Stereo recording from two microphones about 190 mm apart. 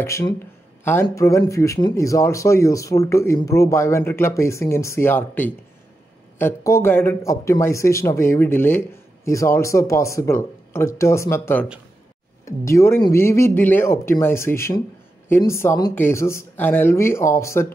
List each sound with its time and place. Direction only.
0.0 s speech: 15° left (ahead or behind)